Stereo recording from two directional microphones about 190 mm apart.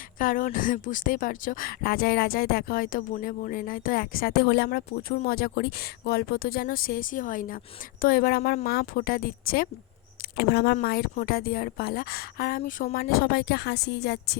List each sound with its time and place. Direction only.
0.2 s speech: 45° left (ahead or behind); by 14.3 s 60° left (ahead or behind)